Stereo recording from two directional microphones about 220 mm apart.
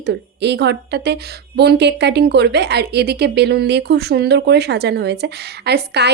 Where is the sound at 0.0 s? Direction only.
50° right (ahead or behind).